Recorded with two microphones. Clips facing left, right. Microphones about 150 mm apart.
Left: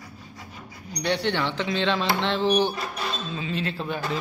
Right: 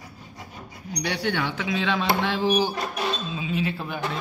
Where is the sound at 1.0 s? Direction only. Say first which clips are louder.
Left 2 dB; 5° right (ahead or behind).